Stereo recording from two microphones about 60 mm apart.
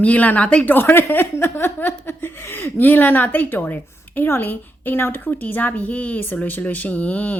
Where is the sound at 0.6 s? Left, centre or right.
Left.